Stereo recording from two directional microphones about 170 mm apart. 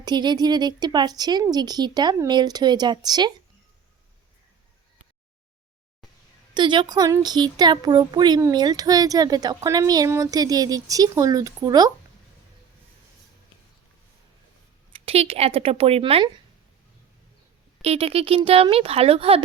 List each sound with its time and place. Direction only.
0.0 s speech: 25° right (ahead or behind)
6.5 s speech: 25° right (ahead or behind)
14.9 s speech: 35° right (ahead or behind)
17.8 s speech: 35° right (ahead or behind)